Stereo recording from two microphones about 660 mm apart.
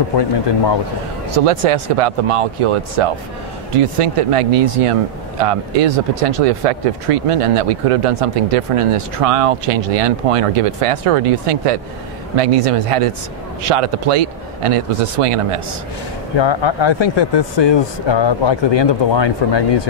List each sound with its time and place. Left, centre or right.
1.3 s speech: right
16.3 s speech: left